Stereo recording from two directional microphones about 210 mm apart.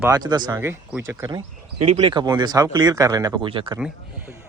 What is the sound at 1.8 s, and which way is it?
Speech, 30° right (ahead or behind).